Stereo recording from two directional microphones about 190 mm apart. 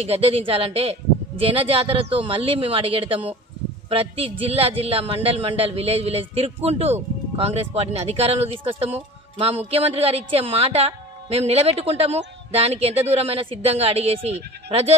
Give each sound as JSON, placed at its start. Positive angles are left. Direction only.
{"t": 0.0, "sound": "a man's voice", "side_deg": -30}